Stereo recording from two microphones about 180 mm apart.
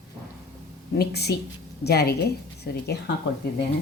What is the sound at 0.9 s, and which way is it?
Speech, 65° left (ahead or behind).